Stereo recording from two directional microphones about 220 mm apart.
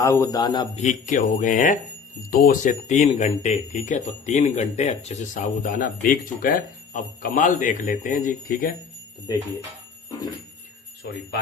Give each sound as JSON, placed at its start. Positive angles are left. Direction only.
{"t": 0.0, "sound": "a man's voice", "side_deg": 15}
{"t": 0.8, "sound": "speech", "side_deg": 35}